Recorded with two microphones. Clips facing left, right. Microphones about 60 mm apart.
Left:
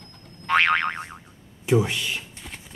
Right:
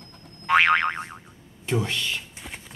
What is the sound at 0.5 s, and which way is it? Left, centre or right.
Boing, centre.